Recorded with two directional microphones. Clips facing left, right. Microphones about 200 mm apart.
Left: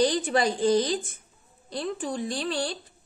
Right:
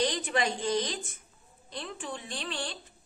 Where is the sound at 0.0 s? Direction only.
35° left (ahead or behind).